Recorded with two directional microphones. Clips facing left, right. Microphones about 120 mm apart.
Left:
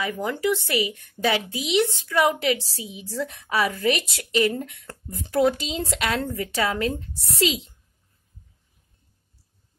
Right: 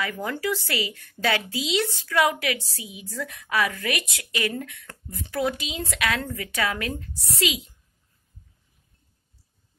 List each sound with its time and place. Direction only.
0.0 s a woman's voice: 15° left (ahead or behind)
4.8 s a woman's voice: 40° left (ahead or behind)